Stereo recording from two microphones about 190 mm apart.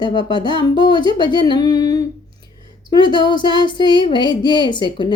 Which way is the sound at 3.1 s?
25° left (ahead or behind).